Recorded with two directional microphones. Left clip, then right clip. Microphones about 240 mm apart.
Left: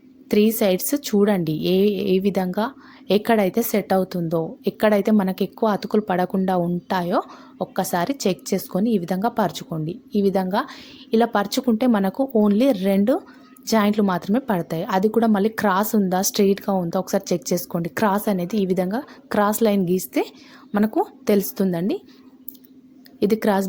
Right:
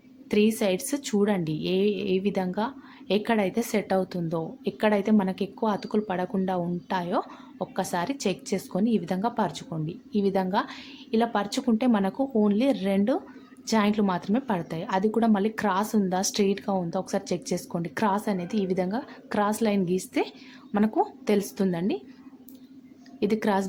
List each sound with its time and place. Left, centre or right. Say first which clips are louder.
0.3 s a woman's voice: left 5 dB; left
23.2 s a woman's voice: left 6 dB; left